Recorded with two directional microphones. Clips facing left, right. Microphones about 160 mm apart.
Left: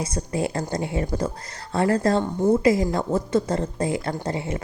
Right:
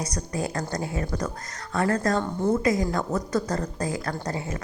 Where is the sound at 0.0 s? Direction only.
25° left (ahead or behind).